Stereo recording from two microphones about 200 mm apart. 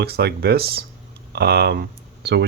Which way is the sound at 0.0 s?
55° right (ahead or behind).